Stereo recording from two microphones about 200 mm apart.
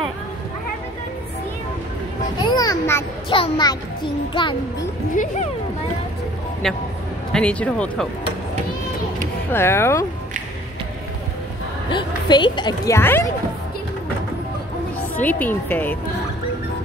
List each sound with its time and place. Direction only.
2.3 s a child's voice: 20° left (ahead or behind)
5.1 s speech: 40° left (ahead or behind)
6.6 s speech: 5° left (ahead or behind)
9.5 s speech: 10° left (ahead or behind)
11.9 s a child's voice: 25° left (ahead or behind)
15.1 s speech: 10° left (ahead or behind)